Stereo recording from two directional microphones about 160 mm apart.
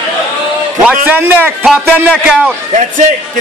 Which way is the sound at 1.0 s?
10° right (ahead or behind).